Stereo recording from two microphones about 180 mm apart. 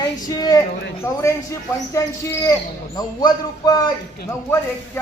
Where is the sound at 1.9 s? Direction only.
15° left (ahead or behind).